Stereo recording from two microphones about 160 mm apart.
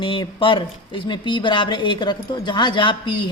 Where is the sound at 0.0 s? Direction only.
30° left (ahead or behind).